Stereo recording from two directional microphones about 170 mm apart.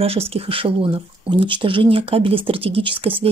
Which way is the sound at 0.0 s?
35° right (ahead or behind).